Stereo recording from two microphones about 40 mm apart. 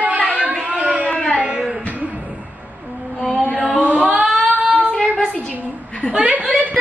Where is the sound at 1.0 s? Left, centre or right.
Left.